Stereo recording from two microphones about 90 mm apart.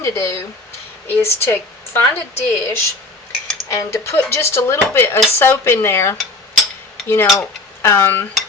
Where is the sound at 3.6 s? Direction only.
30° left (ahead or behind).